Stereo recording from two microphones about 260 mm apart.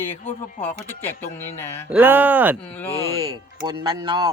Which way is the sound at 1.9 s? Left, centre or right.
Centre.